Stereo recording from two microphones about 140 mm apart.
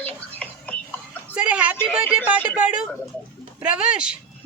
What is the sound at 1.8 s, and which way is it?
A man's voice, 5° right (ahead or behind).